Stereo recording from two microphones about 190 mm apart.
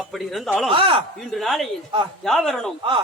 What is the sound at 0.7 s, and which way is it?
Speech, 30° right (ahead or behind).